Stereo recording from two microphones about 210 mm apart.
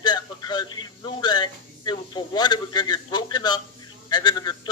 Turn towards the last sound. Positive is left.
turn(degrees=20)  # may be behind; listen again after turning